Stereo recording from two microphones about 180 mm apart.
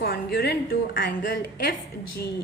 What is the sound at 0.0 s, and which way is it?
A woman's voice, 55° left (ahead or behind).